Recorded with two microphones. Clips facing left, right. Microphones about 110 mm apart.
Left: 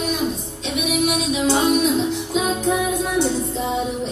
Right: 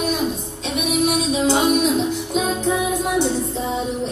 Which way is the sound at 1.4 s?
20° right (ahead or behind).